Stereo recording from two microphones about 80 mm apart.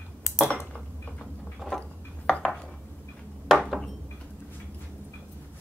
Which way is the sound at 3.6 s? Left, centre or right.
Centre.